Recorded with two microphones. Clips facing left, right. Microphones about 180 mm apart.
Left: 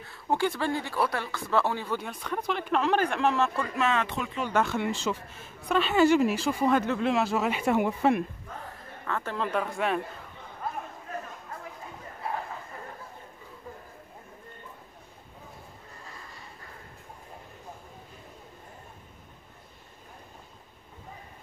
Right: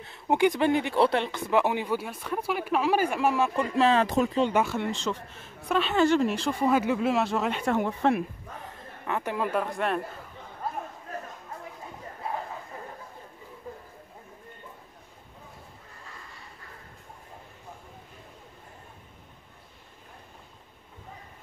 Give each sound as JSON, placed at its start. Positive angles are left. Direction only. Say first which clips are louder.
{"t": 0.0, "sound": "speech", "louder": "right 4 dB", "side_deg": -20}
{"t": 3.6, "sound": "speech", "louder": "right 5 dB", "side_deg": -30}
{"t": 4.5, "sound": "speech", "louder": "right 1 dB", "side_deg": -10}
{"t": 4.7, "sound": "speech", "louder": "even", "side_deg": 5}
{"t": 8.6, "sound": "a man's voice", "louder": "right 2 dB", "side_deg": -15}